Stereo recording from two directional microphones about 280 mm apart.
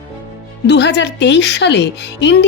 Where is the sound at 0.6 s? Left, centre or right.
Left.